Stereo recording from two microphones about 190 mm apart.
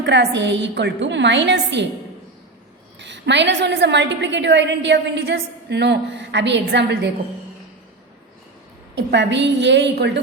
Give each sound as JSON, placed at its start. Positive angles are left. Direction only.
{"t": 0.0, "sound": "a woman's voice", "side_deg": -65}
{"t": 3.0, "sound": "a woman's voice", "side_deg": -70}
{"t": 9.0, "sound": "a woman's voice", "side_deg": -65}